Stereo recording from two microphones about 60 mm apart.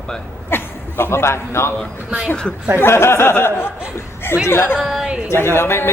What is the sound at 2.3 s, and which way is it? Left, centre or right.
Speech, centre.